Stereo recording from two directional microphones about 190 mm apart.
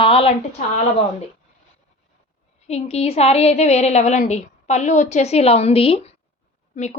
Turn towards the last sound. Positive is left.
turn(degrees=40)  # may be behind; listen again after turning